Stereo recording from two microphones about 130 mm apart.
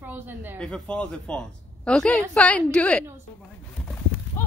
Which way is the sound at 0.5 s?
5° left (ahead or behind).